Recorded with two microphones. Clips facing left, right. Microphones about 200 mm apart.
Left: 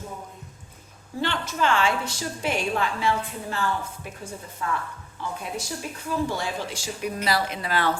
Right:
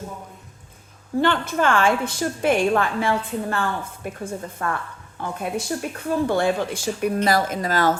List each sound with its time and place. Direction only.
1.2 s a woman's voice: 55° right (ahead or behind)
7.3 s a woman's voice: 45° right (ahead or behind)